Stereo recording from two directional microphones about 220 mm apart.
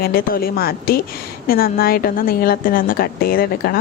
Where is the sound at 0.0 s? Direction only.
40° left (ahead or behind).